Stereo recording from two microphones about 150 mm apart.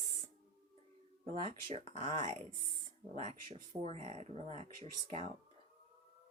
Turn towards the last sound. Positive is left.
turn(degrees=-45)  # may be behind; listen again after turning